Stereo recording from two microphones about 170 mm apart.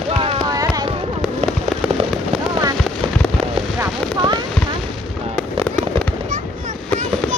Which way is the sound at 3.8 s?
25° right (ahead or behind).